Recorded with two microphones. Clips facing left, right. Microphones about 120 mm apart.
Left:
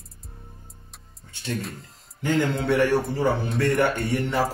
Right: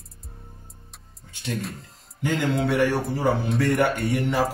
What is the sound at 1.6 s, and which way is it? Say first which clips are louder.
Speech: right 1 dB; centre (ahead or behind).